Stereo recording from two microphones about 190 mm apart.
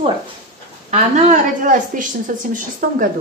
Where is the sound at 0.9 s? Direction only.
35° right (ahead or behind).